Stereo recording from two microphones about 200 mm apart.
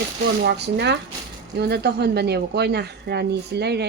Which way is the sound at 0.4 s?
55° right (ahead or behind).